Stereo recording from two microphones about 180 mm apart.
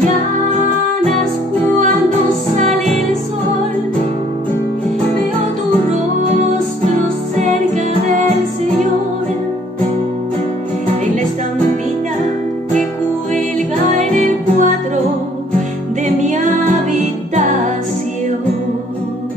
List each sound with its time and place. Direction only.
2.7 s music: 5° left (ahead or behind)
13.9 s music: 45° right (ahead or behind)
16.1 s music: 45° right (ahead or behind)